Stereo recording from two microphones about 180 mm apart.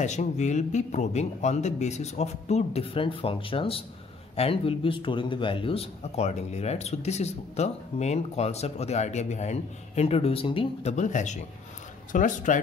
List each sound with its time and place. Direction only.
0.0 s speech: 40° left (ahead or behind)